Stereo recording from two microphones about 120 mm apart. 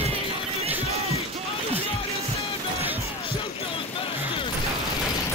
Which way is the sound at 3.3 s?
50° left (ahead or behind).